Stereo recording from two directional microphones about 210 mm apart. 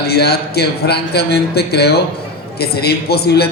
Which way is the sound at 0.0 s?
50° left (ahead or behind).